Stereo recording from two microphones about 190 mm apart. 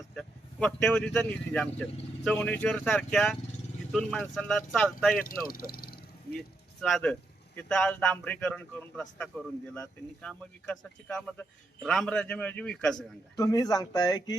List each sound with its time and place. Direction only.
0.2 s speech: centre (ahead or behind)
5.2 s speech: 50° left (ahead or behind)
6.8 s speech: 5° left (ahead or behind)
13.3 s speech: 20° left (ahead or behind)